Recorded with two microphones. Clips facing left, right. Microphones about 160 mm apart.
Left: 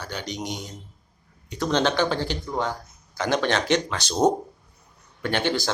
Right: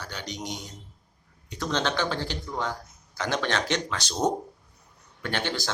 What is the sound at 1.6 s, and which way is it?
Speech, 20° left (ahead or behind).